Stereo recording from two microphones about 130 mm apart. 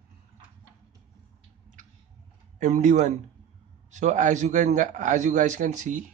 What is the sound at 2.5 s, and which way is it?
A man's voice, 65° right (ahead or behind).